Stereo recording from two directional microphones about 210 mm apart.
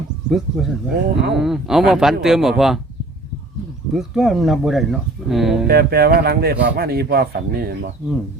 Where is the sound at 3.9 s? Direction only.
Centre (ahead or behind).